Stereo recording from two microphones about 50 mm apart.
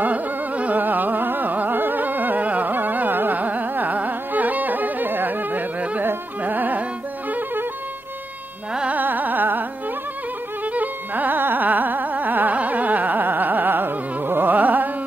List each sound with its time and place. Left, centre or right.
0.0 s carnatic music: right
8.8 s carnatic music: right